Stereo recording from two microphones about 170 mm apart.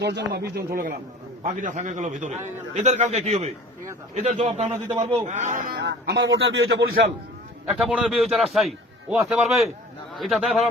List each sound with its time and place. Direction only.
0.0 s speech: 80° right; by 0.9 s 60° right (ahead or behind)
1.5 s a man's voice: 45° right (ahead or behind)
5.7 s a man's voice: 85° right
7.7 s a man's voice: 5° right (ahead or behind)